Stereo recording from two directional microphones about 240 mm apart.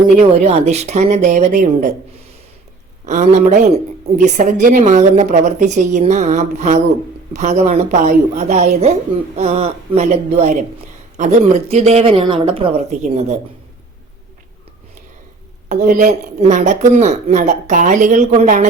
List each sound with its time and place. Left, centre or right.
0.2 s a woman's voice: right
3.1 s a woman's voice: right
15.7 s speech: right